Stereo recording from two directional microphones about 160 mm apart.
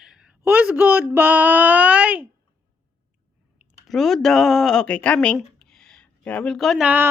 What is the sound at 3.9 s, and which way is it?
Speech, centre (ahead or behind).